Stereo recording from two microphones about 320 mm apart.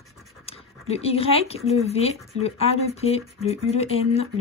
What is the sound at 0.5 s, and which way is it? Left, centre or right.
Speech, centre.